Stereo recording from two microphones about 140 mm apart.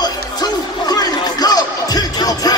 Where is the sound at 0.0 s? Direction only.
30° left (ahead or behind).